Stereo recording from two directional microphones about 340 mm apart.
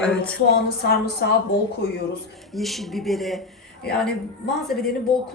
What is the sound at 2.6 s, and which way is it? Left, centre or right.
Speech, centre.